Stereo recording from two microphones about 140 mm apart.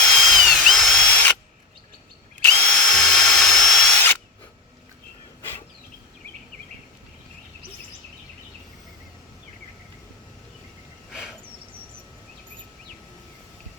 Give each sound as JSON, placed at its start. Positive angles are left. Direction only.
{"t": 0.0, "sound": "drill", "side_deg": 5}
{"t": 2.4, "sound": "drill", "side_deg": 10}
{"t": 11.1, "sound": "a sound", "side_deg": -5}